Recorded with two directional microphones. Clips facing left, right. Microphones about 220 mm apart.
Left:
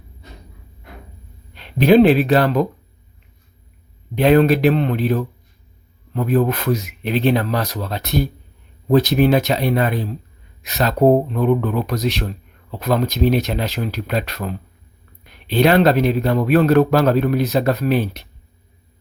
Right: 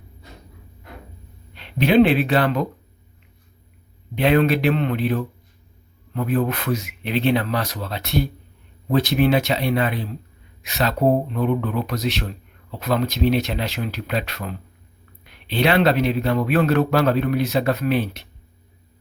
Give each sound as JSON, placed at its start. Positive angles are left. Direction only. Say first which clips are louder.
{"t": 1.5, "sound": "speech", "louder": "left 4 dB", "side_deg": 40}
{"t": 4.1, "sound": "a man's voice", "louder": "left 4 dB", "side_deg": 40}